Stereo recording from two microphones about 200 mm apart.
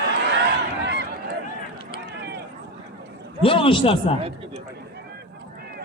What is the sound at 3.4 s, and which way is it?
Speech, 25° left (ahead or behind).